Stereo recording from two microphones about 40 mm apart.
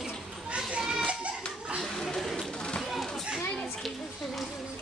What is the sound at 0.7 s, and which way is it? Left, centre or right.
Children playing, centre.